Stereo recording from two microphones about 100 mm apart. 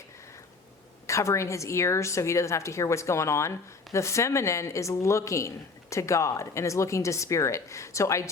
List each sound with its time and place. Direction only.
1.0 s a woman's voice: 30° left (ahead or behind)